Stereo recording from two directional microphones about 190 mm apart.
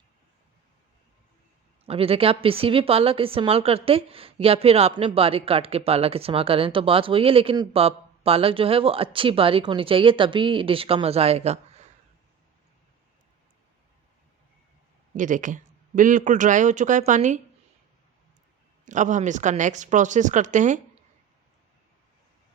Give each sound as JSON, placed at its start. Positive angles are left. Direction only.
{"t": 1.9, "sound": "speech", "side_deg": -30}
{"t": 15.1, "sound": "a man's voice", "side_deg": -45}
{"t": 18.9, "sound": "a man's voice", "side_deg": -40}